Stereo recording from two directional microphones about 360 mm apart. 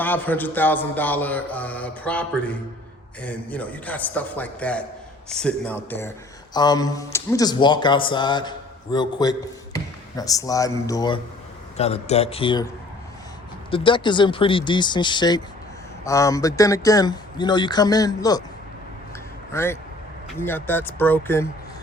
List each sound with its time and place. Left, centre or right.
0.0 s speech: centre
13.7 s speech: centre
19.5 s speech: centre